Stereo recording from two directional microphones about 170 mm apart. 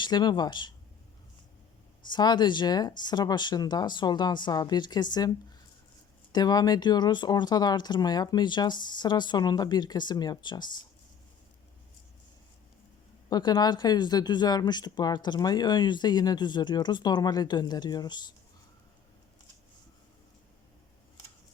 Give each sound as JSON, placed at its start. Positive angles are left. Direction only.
{"t": 0.0, "sound": "a woman's voice", "side_deg": 25}
{"t": 2.0, "sound": "a woman's voice", "side_deg": 25}
{"t": 6.3, "sound": "a woman's voice", "side_deg": 25}
{"t": 13.3, "sound": "a woman's voice", "side_deg": 25}